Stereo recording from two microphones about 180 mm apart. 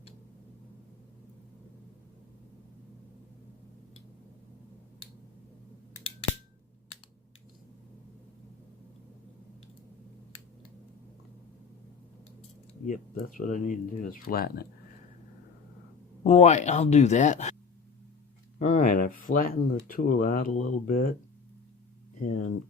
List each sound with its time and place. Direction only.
12.8 s speech: 45° left (ahead or behind)
16.2 s speech: 35° left (ahead or behind)
18.6 s speech: 45° left (ahead or behind)
22.2 s speech: 45° left (ahead or behind)